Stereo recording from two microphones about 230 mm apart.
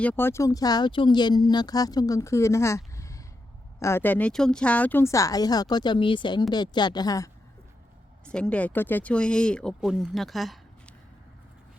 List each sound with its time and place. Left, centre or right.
0.0 s speech: centre
8.2 s speech: centre